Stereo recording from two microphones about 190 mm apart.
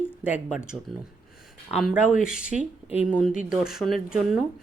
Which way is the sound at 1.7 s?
Centre (ahead or behind).